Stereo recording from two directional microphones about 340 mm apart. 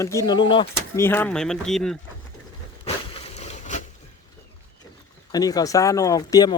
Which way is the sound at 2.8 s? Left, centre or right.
Centre.